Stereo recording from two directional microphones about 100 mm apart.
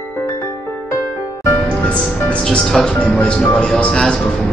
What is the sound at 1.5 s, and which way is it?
Music, 10° left (ahead or behind).